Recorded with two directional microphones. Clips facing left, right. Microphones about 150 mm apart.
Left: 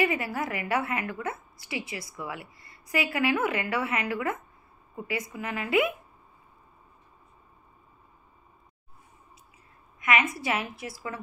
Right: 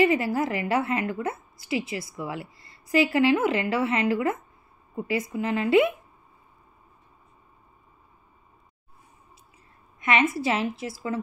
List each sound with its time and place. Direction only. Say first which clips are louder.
0.0 s a woman's voice: right 6 dB; 25° right (ahead or behind)
9.9 s a woman's voice: right 3 dB; 30° right (ahead or behind)